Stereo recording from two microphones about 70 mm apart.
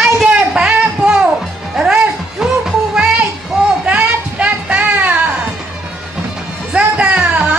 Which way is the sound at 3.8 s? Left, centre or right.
Centre.